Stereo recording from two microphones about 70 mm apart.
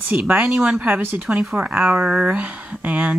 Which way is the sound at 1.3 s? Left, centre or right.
Centre.